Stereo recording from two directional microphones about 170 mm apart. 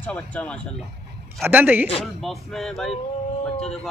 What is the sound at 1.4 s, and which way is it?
Speech, 10° right (ahead or behind).